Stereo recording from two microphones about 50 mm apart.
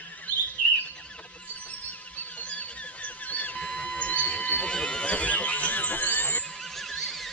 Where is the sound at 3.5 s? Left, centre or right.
Centre.